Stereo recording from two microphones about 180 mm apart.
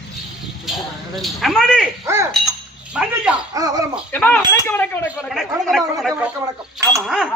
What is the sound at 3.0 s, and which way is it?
Speech, 5° right (ahead or behind).